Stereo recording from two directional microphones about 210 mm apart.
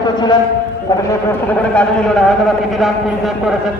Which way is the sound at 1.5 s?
5° left (ahead or behind).